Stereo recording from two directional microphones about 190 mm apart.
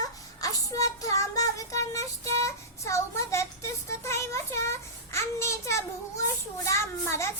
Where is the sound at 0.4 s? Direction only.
15° left (ahead or behind).